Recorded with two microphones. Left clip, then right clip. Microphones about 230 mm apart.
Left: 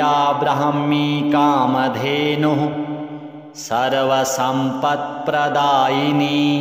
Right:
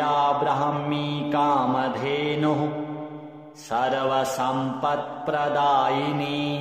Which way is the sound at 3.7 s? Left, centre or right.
Left.